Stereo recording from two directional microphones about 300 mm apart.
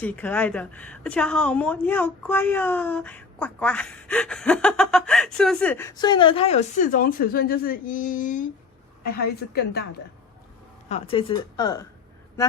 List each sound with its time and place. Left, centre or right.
0.0 s a woman's voice: centre; by 9.8 s left
10.8 s a woman's voice: centre